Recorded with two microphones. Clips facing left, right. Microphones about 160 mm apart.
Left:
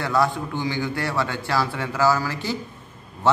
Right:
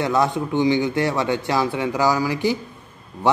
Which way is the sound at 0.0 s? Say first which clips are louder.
Right 2 dB; 20° right (ahead or behind).